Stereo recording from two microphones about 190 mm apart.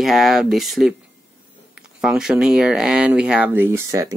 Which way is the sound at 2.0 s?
Centre (ahead or behind).